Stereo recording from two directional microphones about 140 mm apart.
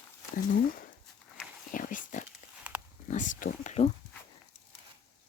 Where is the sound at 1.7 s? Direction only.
70° left (ahead or behind).